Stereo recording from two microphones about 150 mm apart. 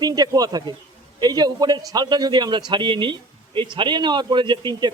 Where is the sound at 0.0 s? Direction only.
25° right (ahead or behind).